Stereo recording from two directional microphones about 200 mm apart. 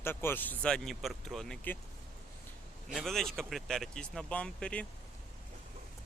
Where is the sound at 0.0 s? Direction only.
10° left (ahead or behind).